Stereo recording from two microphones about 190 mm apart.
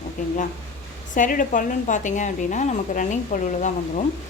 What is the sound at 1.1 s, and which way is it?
A woman's voice, 45° left (ahead or behind).